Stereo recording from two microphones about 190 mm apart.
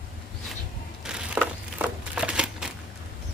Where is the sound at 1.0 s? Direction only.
5° right (ahead or behind).